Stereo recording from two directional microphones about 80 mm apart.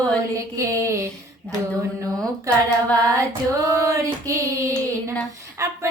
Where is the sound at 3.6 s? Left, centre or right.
Right.